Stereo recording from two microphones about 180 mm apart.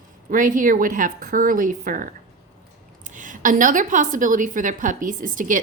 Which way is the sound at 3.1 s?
45° right (ahead or behind).